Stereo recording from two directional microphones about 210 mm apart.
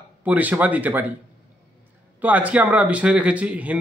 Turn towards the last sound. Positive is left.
turn(degrees=-5)  # may be behind; listen again after turning